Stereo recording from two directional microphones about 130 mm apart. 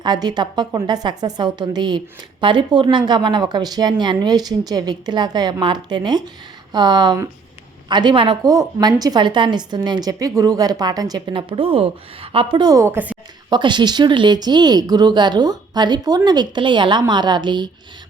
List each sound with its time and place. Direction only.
0.0 s a woman's voice: 30° right (ahead or behind); by 13.1 s 15° right (ahead or behind)
13.5 s a woman's voice: 35° right (ahead or behind)